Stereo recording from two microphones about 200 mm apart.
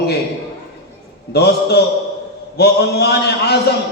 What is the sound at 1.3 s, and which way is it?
A man's voice, 55° left (ahead or behind).